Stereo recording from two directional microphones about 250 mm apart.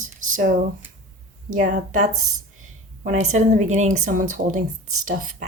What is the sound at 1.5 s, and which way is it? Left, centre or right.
A woman's voice, right.